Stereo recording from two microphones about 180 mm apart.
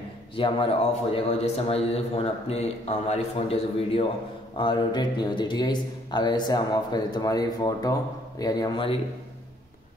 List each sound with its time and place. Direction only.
0.4 s speech: 30° left (ahead or behind)